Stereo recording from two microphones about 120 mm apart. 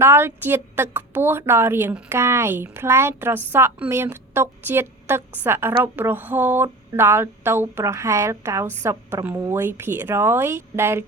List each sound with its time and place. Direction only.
0.0 s speech: 20° right (ahead or behind)